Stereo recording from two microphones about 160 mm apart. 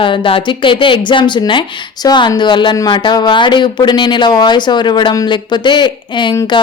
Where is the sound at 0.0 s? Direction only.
30° left (ahead or behind).